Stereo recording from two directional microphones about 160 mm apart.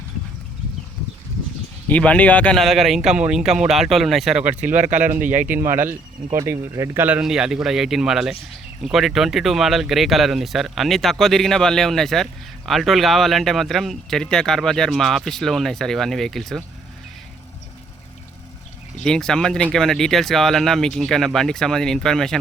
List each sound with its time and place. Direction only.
1.9 s speech: 10° left (ahead or behind); by 4.7 s 5° right (ahead or behind)
4.7 s speech: 50° right (ahead or behind)
5.5 s speech: 15° right (ahead or behind); by 16.6 s centre (ahead or behind)
19.0 s speech: 5° left (ahead or behind)